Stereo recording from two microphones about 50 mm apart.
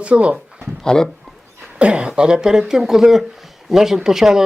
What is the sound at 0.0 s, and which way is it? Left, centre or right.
Speech, right.